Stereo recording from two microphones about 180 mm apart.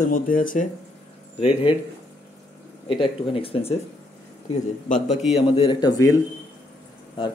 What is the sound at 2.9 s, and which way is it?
Speech, 30° left (ahead or behind).